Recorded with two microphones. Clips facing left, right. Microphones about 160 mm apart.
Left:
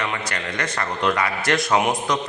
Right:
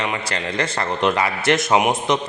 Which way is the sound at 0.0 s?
25° right (ahead or behind).